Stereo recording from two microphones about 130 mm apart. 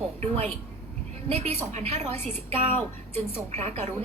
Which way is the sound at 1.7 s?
65° right (ahead or behind).